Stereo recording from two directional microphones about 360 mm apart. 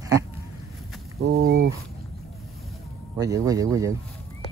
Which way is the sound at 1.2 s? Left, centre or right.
Right.